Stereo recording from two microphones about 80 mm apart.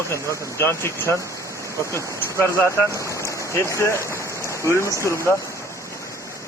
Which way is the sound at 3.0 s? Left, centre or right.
Left.